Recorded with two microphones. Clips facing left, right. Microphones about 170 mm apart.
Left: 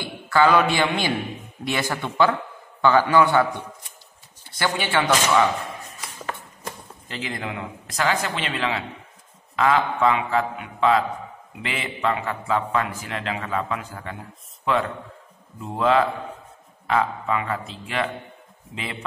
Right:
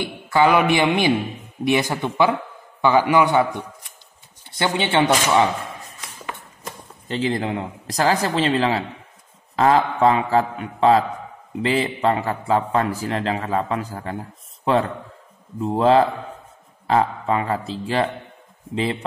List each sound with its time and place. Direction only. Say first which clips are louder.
0.0 s a man's voice: right 2 dB; 20° right (ahead or behind)
4.6 s speech: right 4 dB; 20° right (ahead or behind)
7.1 s a man's voice: right 9 dB; 30° right (ahead or behind)